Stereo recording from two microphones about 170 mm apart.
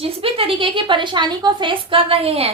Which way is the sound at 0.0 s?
35° right (ahead or behind).